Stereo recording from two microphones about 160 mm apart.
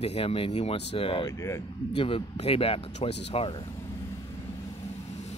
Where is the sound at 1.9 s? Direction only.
35° left (ahead or behind).